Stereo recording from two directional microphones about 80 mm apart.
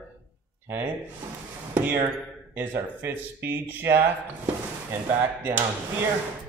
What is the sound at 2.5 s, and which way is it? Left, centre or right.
Speech, right.